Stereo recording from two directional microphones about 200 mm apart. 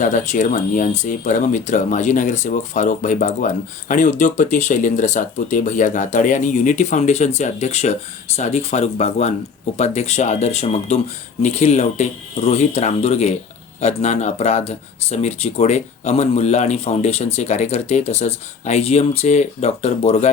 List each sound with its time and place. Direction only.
0.0 s speech: 40° left (ahead or behind)